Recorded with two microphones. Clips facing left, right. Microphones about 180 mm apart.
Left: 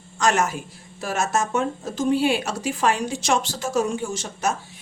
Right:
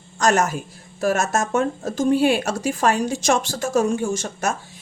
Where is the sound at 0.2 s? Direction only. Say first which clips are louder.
Right 2 dB; 40° right (ahead or behind).